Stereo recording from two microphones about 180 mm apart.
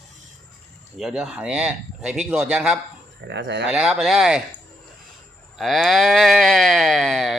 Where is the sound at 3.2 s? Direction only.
75° right (ahead or behind).